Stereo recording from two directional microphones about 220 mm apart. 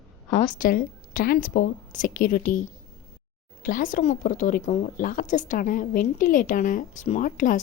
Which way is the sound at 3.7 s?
35° left (ahead or behind).